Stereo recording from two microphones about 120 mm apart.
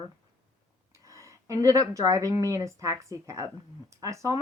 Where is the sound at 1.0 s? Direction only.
25° right (ahead or behind).